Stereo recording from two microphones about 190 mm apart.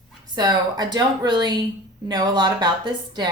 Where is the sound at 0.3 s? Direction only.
20° right (ahead or behind).